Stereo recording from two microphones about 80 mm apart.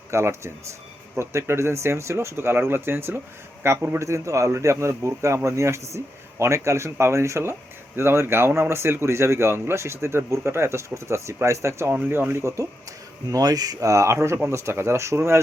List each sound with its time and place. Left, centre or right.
0.1 s speech: right
11.9 s speech: right
13.3 s speech: right